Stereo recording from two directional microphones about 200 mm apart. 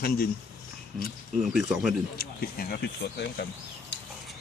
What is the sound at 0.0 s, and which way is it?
Speech, 50° left (ahead or behind).